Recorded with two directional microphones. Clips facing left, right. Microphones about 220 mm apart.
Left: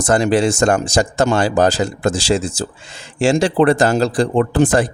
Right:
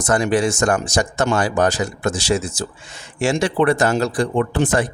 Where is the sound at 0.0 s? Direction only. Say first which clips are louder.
Left 3 dB; 30° left (ahead or behind).